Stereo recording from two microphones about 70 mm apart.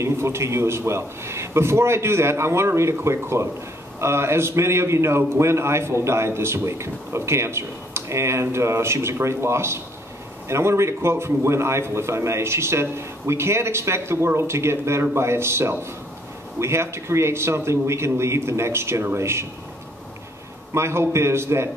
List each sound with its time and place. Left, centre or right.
0.0 s a man's voice: right
20.7 s a man's voice: right